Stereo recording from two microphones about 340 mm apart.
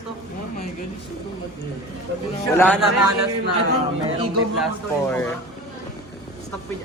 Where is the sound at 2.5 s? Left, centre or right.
Centre.